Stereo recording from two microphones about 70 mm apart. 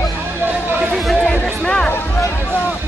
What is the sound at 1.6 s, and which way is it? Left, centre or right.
Music, centre.